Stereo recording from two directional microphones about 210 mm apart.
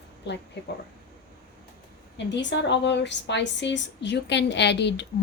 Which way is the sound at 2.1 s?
55° left (ahead or behind).